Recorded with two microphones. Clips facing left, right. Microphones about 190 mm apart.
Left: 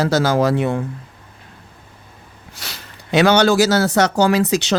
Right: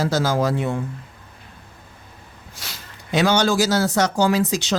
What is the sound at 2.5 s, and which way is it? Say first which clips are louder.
Speech: left 3 dB; 70° left (ahead or behind).